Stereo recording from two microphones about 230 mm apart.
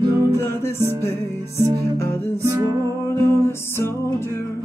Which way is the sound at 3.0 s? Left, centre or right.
Centre.